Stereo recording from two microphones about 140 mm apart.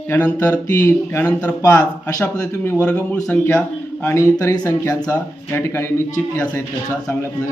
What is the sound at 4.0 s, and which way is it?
Speech, 20° left (ahead or behind).